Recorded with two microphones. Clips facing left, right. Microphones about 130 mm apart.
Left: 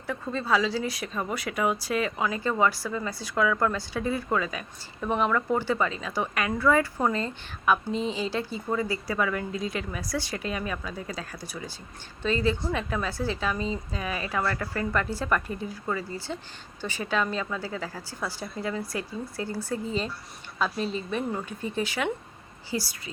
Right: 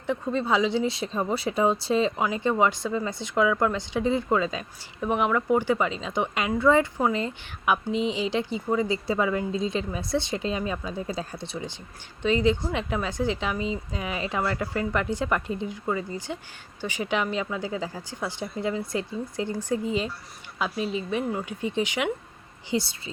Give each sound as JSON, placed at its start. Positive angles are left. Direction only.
{"t": 0.1, "sound": "a woman's voice", "side_deg": -20}